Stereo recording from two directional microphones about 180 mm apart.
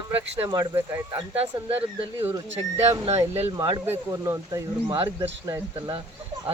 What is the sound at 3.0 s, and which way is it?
Speech, 35° right (ahead or behind).